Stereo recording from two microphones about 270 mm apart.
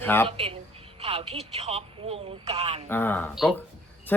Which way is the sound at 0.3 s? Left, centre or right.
Right.